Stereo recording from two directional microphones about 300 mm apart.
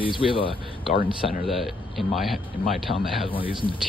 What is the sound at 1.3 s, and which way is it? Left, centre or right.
A man's voice, centre.